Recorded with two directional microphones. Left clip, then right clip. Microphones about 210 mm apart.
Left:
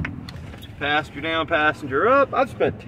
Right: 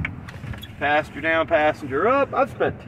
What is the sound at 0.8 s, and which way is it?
Speech, 5° right (ahead or behind).